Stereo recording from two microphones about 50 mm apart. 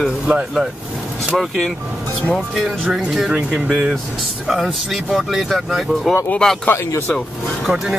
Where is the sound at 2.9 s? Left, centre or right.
Centre.